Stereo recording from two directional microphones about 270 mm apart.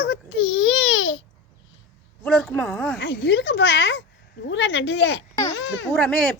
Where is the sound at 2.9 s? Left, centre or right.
Left.